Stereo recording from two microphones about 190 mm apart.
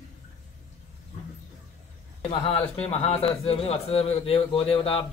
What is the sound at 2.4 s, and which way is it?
A man's voice, 30° left (ahead or behind).